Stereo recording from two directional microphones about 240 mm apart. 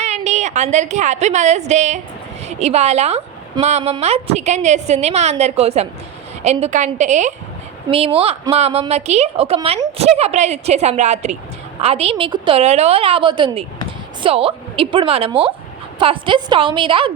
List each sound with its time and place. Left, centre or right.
0.0 s a woman's voice: right